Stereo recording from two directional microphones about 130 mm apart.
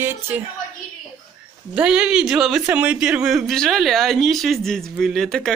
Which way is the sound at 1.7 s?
5° right (ahead or behind).